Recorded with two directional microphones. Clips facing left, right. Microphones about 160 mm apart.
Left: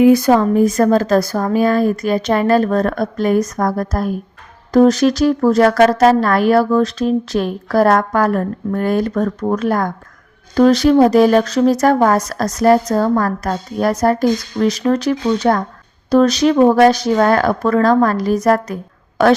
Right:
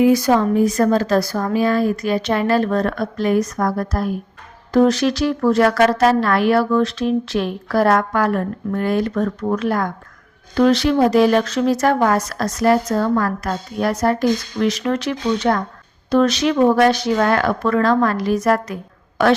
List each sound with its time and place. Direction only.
0.0 s a woman's voice: 55° left (ahead or behind)